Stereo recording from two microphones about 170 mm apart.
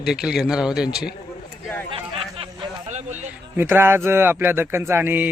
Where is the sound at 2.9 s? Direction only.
45° right (ahead or behind).